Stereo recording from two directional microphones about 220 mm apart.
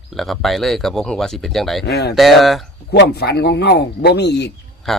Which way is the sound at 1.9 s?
45° left (ahead or behind).